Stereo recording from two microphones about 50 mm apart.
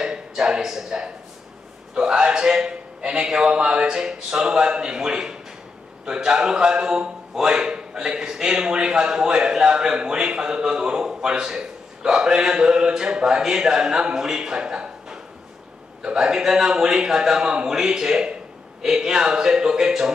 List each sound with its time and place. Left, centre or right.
0.0 s a man's voice: centre